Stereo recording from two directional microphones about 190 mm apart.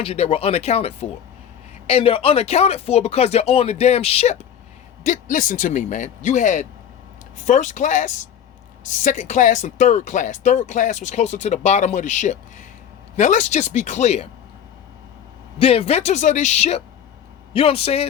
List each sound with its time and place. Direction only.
0.0 s speech: 30° left (ahead or behind)
15.5 s speech: 30° left (ahead or behind)